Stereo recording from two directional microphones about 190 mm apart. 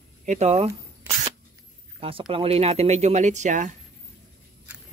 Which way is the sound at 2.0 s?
30° right (ahead or behind).